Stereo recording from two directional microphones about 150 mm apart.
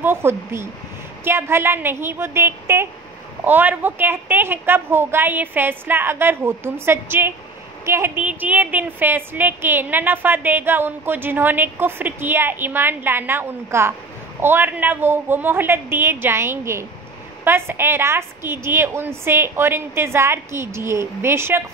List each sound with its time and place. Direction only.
0.0 s a woman's voice: 15° right (ahead or behind)